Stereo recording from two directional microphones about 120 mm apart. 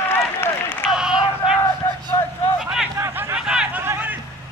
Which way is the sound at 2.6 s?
5° right (ahead or behind).